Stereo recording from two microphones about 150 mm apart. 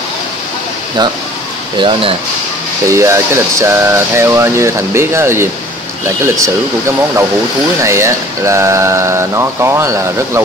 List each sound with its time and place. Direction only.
1.8 s speech: 35° right (ahead or behind)
2.9 s speech: 20° right (ahead or behind)
7.8 s speech: 20° right (ahead or behind)